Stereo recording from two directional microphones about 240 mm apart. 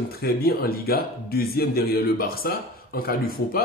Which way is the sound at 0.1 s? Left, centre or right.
Left.